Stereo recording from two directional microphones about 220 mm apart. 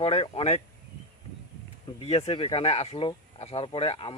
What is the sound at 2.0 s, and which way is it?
Speech, 25° left (ahead or behind).